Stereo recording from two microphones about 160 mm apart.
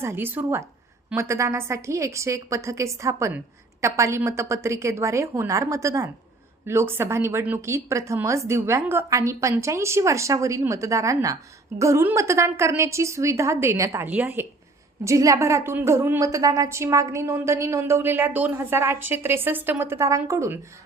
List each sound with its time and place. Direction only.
0.0 s a woman's voice: 15° right (ahead or behind)